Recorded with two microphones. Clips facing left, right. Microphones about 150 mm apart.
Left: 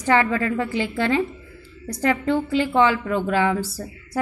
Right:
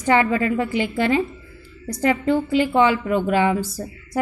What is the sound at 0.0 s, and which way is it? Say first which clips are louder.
A woman's voice: right 1 dB; 15° right (ahead or behind).